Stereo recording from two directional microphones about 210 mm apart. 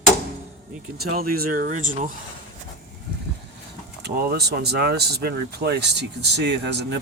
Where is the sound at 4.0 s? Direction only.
50° right (ahead or behind).